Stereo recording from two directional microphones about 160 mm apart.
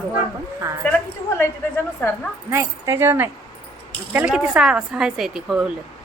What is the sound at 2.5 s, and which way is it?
Speech, 15° right (ahead or behind).